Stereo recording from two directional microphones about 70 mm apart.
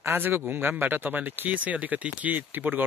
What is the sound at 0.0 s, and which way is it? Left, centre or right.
A man's voice, right.